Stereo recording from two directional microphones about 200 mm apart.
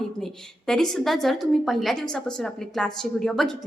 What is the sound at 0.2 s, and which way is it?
A woman's voice, 5° left (ahead or behind).